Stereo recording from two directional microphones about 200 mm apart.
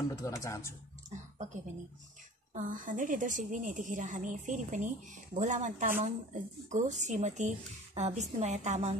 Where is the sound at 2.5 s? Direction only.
40° right (ahead or behind).